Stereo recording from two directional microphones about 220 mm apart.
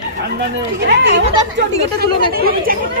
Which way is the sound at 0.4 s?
50° right (ahead or behind).